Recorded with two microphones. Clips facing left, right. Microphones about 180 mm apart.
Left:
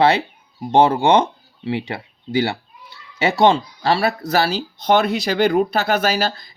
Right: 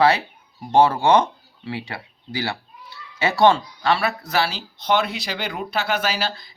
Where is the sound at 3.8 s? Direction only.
35° left (ahead or behind).